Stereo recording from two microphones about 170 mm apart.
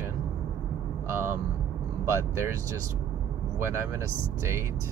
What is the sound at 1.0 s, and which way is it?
Vehicle, 15° right (ahead or behind).